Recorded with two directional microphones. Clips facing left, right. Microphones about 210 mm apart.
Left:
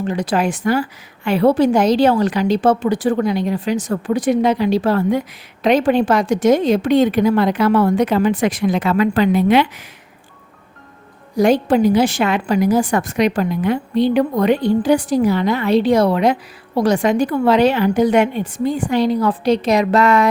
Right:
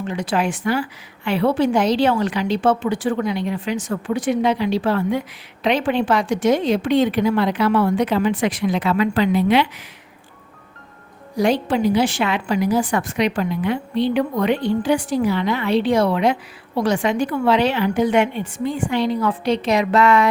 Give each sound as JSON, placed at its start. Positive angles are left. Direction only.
{"t": 0.0, "sound": "a woman's voice", "side_deg": 40}
{"t": 11.3, "sound": "a woman's voice", "side_deg": 45}